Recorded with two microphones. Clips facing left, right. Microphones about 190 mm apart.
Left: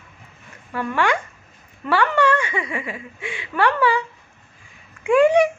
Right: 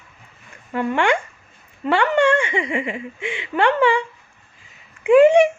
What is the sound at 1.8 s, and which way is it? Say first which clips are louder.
Speech: right 2 dB; 25° right (ahead or behind).